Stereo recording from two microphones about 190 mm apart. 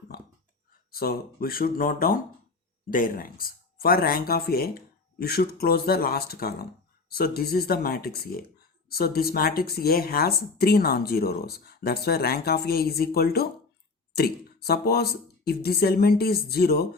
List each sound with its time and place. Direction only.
0.9 s speech: 50° left (ahead or behind)